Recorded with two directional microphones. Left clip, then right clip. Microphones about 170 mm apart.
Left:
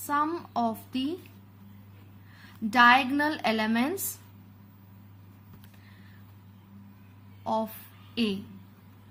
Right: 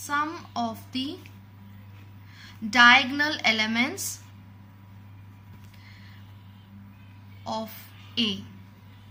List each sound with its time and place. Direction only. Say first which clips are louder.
0.1 s a woman's voice: even; 50° left (ahead or behind)
2.4 s a woman's voice: right 3 dB; 50° left (ahead or behind)
7.4 s a woman's voice: left 3 dB; 50° left (ahead or behind)